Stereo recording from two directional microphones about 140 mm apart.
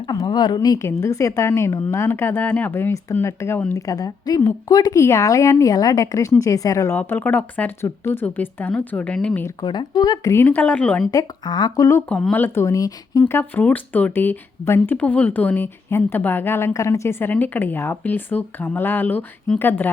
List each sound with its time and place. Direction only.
0.1 s a woman's voice: 25° left (ahead or behind); by 9.5 s 10° left (ahead or behind)
9.6 s a woman's voice: 30° left (ahead or behind)
10.3 s speech: 10° left (ahead or behind)
11.1 s a woman's voice: 25° left (ahead or behind)
12.0 s speech: 10° left (ahead or behind)